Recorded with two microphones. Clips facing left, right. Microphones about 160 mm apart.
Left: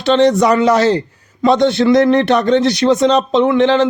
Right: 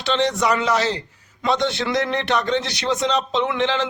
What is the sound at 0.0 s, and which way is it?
A man's voice, 45° left (ahead or behind).